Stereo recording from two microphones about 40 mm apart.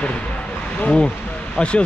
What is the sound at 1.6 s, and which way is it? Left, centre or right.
Speech, left.